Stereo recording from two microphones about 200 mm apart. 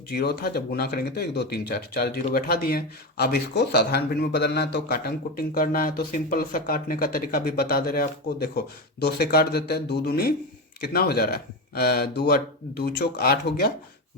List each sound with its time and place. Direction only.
0.1 s speech: 50° left (ahead or behind)